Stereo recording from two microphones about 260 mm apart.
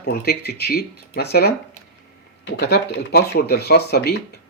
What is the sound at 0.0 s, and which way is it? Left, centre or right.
Speech, left.